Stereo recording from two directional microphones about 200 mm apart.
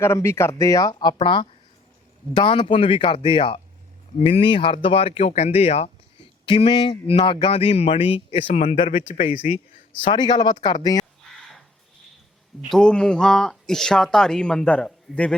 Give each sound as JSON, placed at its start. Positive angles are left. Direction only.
{"t": 0.0, "sound": "speech", "side_deg": 15}
{"t": 9.3, "sound": "speech", "side_deg": -5}
{"t": 10.0, "sound": "speech", "side_deg": 20}
{"t": 11.3, "sound": "a sound", "side_deg": 0}
{"t": 12.7, "sound": "speech", "side_deg": 5}